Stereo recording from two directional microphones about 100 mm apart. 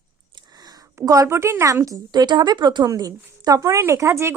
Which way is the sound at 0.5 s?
40° right (ahead or behind).